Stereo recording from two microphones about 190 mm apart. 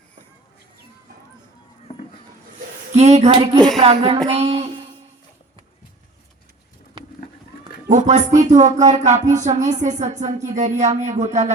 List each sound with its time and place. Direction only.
2.9 s speech: 35° right (ahead or behind)
7.9 s speech: 40° right (ahead or behind)